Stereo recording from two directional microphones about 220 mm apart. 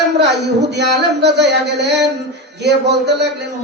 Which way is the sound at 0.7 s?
50° right (ahead or behind).